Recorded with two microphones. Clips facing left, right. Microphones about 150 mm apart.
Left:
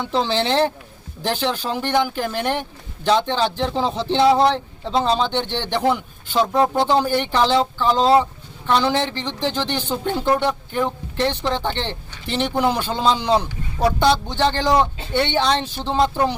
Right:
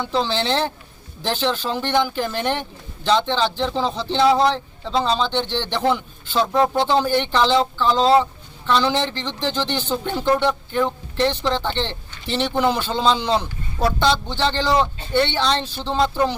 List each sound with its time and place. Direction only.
0.0 s speech: 15° left (ahead or behind)